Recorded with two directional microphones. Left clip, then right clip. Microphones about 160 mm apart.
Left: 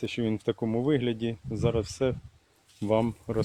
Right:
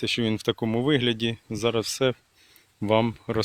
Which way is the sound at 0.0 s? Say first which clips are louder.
Right 5 dB; 15° right (ahead or behind).